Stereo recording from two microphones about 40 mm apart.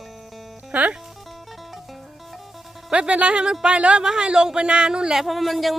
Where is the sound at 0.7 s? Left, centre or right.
Right.